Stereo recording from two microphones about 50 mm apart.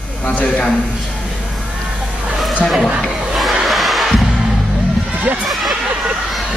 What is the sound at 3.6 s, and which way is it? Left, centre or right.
Music, centre.